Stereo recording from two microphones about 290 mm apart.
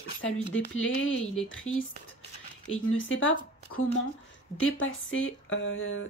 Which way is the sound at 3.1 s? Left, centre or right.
Left.